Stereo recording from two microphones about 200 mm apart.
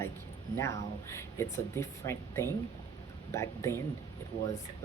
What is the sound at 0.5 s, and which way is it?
Speech, 15° left (ahead or behind).